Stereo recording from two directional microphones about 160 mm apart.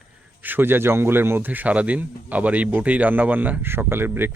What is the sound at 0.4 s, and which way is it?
Speech, 10° right (ahead or behind).